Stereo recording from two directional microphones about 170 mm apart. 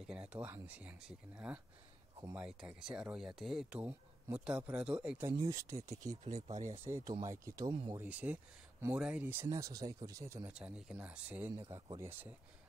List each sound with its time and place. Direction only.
0.0 s speech: 5° right (ahead or behind)
6.2 s speech: 40° right (ahead or behind)
6.8 s speech: 15° right (ahead or behind)
8.0 s speech: 10° right (ahead or behind)
10.5 s speech: 5° right (ahead or behind)
11.5 s speech: 20° right (ahead or behind)